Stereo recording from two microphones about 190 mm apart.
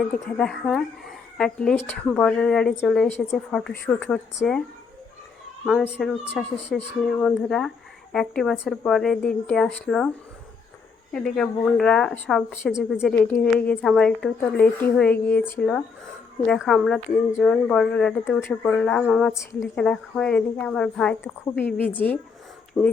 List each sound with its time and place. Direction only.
0.3 s speech: 5° left (ahead or behind)
5.6 s speech: centre (ahead or behind)
11.1 s speech: 5° left (ahead or behind)